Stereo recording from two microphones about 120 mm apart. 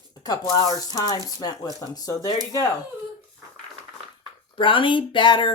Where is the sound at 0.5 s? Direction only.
35° left (ahead or behind).